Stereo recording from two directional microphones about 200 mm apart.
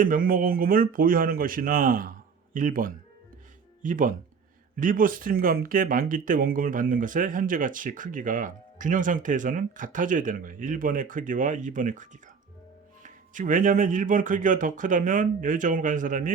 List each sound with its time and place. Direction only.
0.0 s speech: 45° right (ahead or behind)